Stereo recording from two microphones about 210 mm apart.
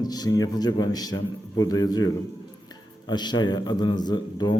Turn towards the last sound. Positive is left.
turn(degrees=20)  # may be behind; listen again after turning